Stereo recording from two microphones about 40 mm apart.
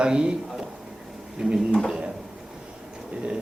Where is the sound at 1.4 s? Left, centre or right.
Centre.